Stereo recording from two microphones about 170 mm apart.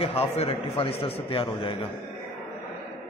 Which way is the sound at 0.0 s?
35° left (ahead or behind).